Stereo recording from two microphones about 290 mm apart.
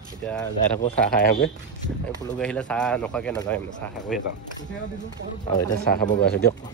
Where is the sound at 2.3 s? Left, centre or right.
Centre.